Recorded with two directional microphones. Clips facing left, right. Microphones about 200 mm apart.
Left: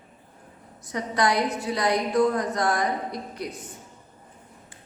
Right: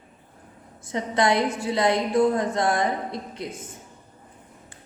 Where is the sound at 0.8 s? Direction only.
25° right (ahead or behind).